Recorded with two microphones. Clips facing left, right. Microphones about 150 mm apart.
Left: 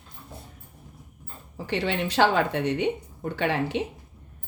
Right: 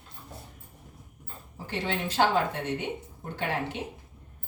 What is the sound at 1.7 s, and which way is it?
A woman's voice, 75° left (ahead or behind).